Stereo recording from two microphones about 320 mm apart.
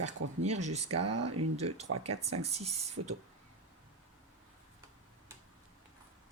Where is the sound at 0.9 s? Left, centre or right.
Right.